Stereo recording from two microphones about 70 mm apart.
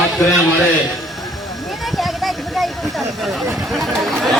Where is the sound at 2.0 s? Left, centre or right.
Centre.